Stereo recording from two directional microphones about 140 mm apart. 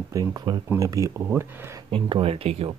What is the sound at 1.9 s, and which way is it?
Speech, 40° right (ahead or behind).